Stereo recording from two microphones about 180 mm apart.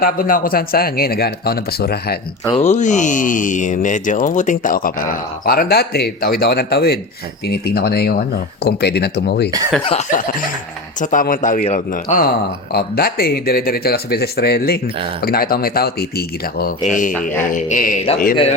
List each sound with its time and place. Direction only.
0.0 s speech: 50° left (ahead or behind)
2.6 s speech: 40° left (ahead or behind); by 9.5 s 65° left (ahead or behind)
9.8 s cough: 40° left (ahead or behind)
11.0 s speech: 50° left (ahead or behind)
12.7 s speech: 55° left (ahead or behind)